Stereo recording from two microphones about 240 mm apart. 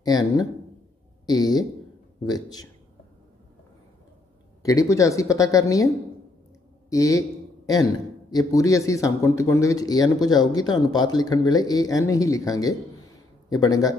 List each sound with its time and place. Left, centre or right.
0.0 s a man's voice: centre
4.6 s a man's voice: centre
6.9 s a man's voice: centre